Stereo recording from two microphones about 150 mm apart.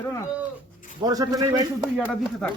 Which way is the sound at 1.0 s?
25° right (ahead or behind).